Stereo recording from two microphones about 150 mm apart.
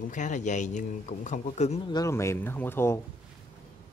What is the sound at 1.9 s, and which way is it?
Speech, 20° left (ahead or behind).